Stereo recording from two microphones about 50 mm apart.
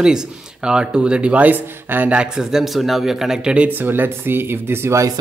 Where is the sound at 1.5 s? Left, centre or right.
Right.